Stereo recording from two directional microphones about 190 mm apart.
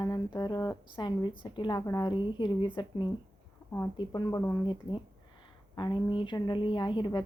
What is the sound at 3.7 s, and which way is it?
A woman's voice, 10° left (ahead or behind).